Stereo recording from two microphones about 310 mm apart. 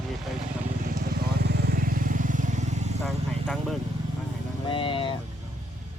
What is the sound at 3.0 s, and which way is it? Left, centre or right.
Speech, centre.